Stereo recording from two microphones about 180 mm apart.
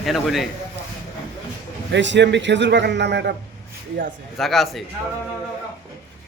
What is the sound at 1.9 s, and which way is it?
A man's voice, 85° right.